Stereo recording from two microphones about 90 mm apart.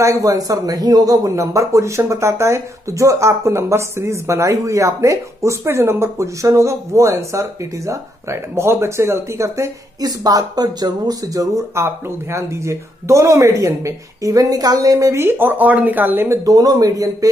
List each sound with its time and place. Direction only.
0.0 s speech: 40° right (ahead or behind); by 16.3 s 20° right (ahead or behind)
16.4 s speech: 40° right (ahead or behind)